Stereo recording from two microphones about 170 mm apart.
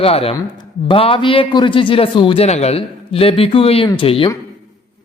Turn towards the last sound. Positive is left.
turn(degrees=30)  # may be behind; listen again after turning